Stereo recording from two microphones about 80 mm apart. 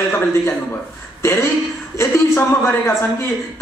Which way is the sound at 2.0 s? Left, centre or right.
Left.